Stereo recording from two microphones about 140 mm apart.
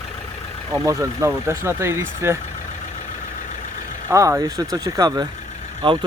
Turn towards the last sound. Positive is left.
turn(degrees=-35)  # may be behind; listen again after turning